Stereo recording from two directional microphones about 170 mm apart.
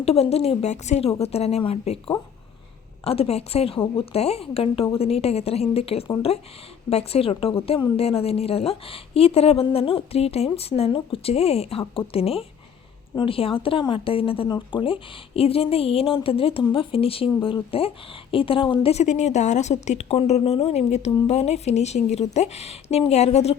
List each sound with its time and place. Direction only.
0.0 s speech: 35° left (ahead or behind)